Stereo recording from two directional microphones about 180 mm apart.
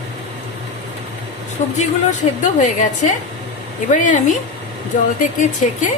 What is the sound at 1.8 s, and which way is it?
A woman's voice, 40° left (ahead or behind).